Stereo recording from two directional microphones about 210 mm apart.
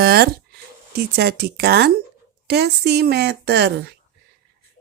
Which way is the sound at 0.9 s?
50° right (ahead or behind).